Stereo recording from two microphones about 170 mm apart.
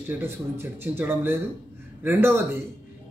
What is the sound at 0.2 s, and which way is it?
Speech, 15° right (ahead or behind).